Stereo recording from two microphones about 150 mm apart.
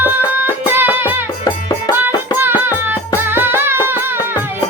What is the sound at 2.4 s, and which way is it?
Music, 15° right (ahead or behind).